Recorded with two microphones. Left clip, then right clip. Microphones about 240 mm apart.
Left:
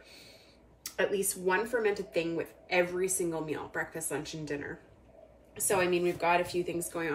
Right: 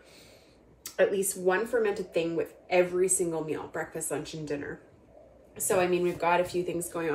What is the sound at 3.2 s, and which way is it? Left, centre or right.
Speech, left.